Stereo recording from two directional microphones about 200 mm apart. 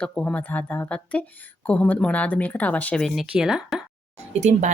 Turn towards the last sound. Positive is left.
turn(degrees=-35)  # may be behind; listen again after turning